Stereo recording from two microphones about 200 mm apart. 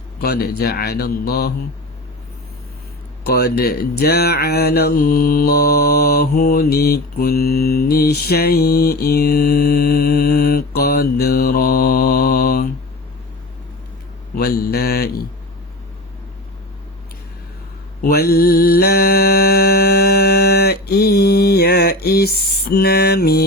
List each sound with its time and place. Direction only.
0.2 s speech: 50° left (ahead or behind)
3.2 s speech: 55° left (ahead or behind)
14.3 s speech: 50° left (ahead or behind)
18.0 s mantra: 50° left (ahead or behind)